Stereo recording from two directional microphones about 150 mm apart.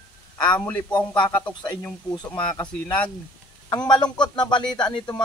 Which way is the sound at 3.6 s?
30° left (ahead or behind).